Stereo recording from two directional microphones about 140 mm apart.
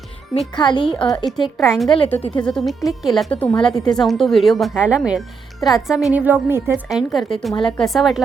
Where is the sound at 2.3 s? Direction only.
5° left (ahead or behind).